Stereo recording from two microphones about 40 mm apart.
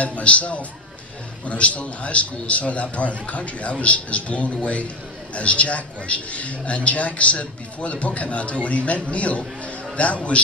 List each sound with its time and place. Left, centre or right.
0.0 s a man's voice: left